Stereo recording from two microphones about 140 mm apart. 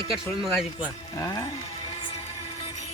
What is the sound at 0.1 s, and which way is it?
Speech, centre (ahead or behind).